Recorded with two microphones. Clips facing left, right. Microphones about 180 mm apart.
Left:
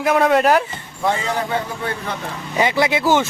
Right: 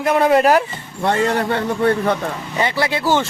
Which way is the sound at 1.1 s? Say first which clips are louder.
Right 3 dB; 65° right (ahead or behind).